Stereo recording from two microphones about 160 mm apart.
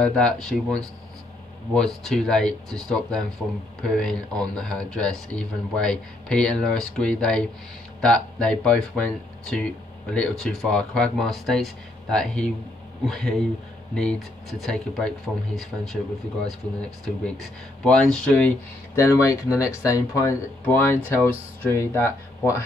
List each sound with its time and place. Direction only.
0.0 s speech: 5° left (ahead or behind)
17.0 s speech: 5° left (ahead or behind)
18.9 s speech: 20° left (ahead or behind)